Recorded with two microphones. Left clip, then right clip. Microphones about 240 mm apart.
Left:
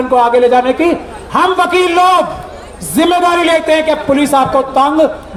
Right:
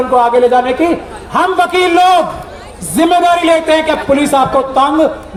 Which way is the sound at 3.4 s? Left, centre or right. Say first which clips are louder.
Even; left.